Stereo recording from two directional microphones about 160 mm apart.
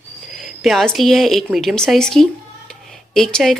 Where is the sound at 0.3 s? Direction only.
Centre (ahead or behind).